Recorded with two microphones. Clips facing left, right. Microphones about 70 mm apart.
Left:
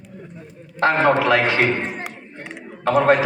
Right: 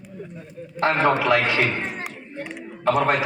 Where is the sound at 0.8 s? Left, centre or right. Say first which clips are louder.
Left 3 dB; left.